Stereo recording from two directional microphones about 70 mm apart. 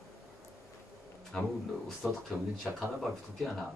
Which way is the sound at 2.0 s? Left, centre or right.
Right.